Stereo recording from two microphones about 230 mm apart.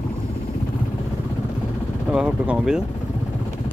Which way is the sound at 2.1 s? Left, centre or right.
Centre.